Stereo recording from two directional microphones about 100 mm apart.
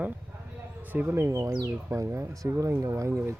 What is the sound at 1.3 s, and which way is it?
Speech, 35° right (ahead or behind).